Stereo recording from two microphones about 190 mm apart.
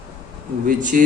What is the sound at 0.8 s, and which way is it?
Speech, 45° right (ahead or behind).